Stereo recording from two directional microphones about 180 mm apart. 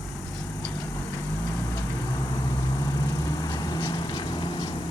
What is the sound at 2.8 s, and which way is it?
Vehicle, 20° left (ahead or behind).